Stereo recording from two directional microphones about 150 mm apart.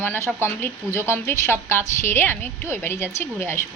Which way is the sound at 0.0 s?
15° left (ahead or behind).